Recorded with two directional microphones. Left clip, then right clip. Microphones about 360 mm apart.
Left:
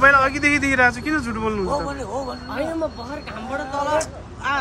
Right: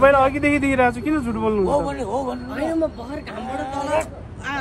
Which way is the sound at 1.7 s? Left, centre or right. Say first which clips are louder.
Right 3 dB; right.